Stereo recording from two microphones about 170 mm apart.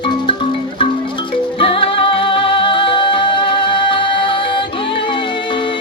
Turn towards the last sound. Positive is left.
turn(degrees=30)  # may be behind; listen again after turning